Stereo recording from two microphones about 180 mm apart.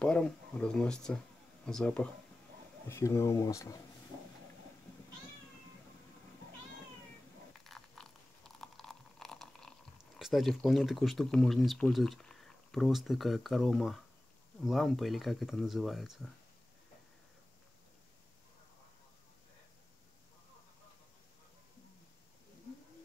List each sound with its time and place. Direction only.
0.0 s speech: 5° left (ahead or behind)
2.9 s speech: 15° left (ahead or behind)
7.5 s a sound: centre (ahead or behind)
14.6 s speech: centre (ahead or behind)